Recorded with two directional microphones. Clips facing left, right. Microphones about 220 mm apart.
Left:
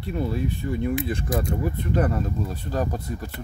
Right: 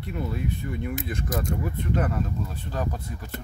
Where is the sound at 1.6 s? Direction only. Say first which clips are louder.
Left 3 dB; 35° left (ahead or behind).